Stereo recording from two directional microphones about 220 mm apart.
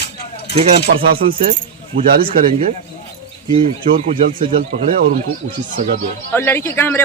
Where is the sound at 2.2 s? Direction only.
25° right (ahead or behind).